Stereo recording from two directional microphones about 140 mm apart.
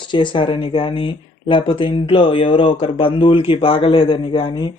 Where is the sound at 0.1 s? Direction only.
35° left (ahead or behind).